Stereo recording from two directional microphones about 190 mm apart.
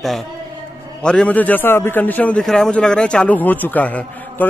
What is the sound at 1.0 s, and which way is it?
Speech, 5° left (ahead or behind).